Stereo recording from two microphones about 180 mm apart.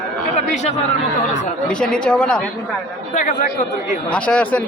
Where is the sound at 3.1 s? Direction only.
45° left (ahead or behind).